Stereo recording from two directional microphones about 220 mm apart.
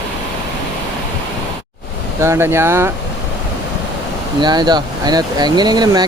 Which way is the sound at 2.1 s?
10° right (ahead or behind).